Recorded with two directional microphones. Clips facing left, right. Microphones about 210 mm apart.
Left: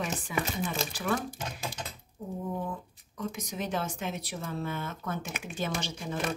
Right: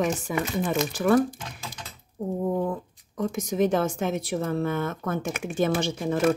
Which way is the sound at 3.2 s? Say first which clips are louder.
Right 11 dB; 45° right (ahead or behind).